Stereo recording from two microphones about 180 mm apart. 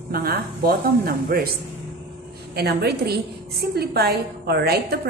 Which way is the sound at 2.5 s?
60° right (ahead or behind).